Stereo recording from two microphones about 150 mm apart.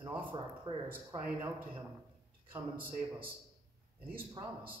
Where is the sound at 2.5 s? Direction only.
15° right (ahead or behind).